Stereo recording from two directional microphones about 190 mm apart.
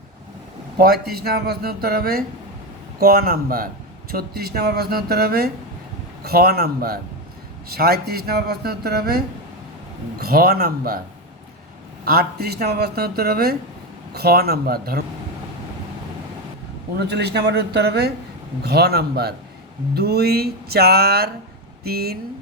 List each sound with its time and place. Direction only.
1.1 s speech: 55° right (ahead or behind)
12.0 s speech: 55° right (ahead or behind)
16.9 s speech: 60° right (ahead or behind)